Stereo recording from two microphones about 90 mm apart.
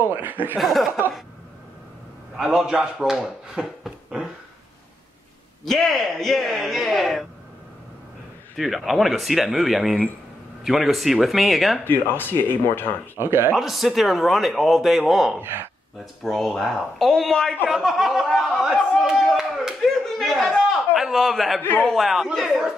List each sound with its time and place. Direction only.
0.0 s speech: 20° right (ahead or behind)
0.6 s speech: centre (ahead or behind)
2.3 s speech: 5° right (ahead or behind)
5.7 s speech: 5° left (ahead or behind)
8.5 s speech: centre (ahead or behind)
11.8 s speech: 20° left (ahead or behind)
13.2 s speech: 25° right (ahead or behind)
13.6 s speech: centre (ahead or behind)
15.3 s speech: 25° right (ahead or behind)
16.2 s speech: 5° left (ahead or behind)
19.8 s a sound: 5° left (ahead or behind)
20.9 s a man's voice: 5° right (ahead or behind)
21.5 s speech: 20° left (ahead or behind)
21.8 s speech: centre (ahead or behind)